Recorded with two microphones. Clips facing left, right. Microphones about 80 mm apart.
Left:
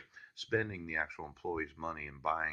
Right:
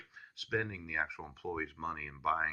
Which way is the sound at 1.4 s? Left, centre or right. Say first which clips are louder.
Even; centre.